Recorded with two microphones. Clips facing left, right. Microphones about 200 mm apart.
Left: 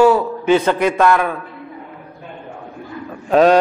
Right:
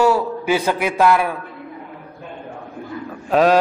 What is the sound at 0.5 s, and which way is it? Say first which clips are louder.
Speech: left 5 dB; 10° right (ahead or behind).